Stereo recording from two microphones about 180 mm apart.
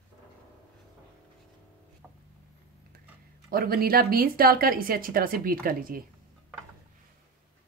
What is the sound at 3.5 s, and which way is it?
Speech, 55° right (ahead or behind).